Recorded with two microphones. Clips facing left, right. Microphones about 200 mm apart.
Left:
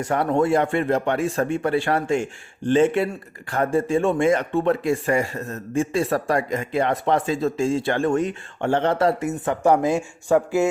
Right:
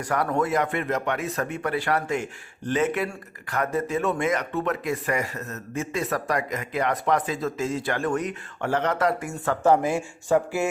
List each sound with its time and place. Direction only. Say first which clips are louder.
0.0 s speech: left 4 dB; 25° left (ahead or behind)